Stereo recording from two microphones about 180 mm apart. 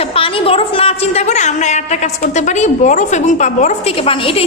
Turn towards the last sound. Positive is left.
turn(degrees=30)  # may be behind; listen again after turning